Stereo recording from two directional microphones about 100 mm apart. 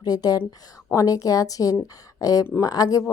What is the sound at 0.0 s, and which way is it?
A woman's voice, 40° left (ahead or behind).